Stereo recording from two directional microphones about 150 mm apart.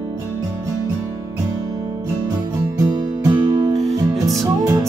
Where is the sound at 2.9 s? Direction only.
25° right (ahead or behind).